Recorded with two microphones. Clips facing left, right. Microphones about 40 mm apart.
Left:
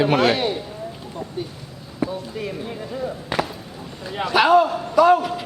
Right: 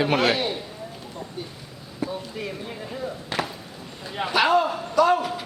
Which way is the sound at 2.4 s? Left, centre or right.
Centre.